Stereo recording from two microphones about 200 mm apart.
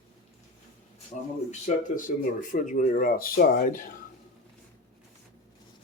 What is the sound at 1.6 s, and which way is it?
Speech, 40° left (ahead or behind).